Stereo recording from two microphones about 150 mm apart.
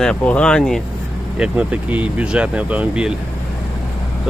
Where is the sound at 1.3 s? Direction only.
10° right (ahead or behind).